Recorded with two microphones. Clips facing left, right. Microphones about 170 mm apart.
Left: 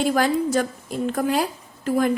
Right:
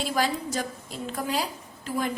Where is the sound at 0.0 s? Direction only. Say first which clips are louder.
Left 7 dB; 55° left (ahead or behind).